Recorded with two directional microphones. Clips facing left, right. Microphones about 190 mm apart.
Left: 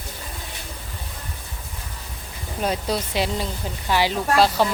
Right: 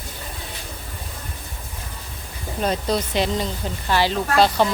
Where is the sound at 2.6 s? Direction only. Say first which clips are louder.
Right 2 dB; 5° left (ahead or behind).